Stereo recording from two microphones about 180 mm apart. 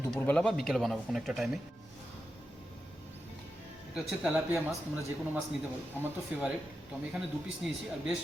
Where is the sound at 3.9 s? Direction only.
5° right (ahead or behind).